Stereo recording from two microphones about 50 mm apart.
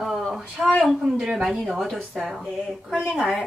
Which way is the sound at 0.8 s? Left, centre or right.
Centre.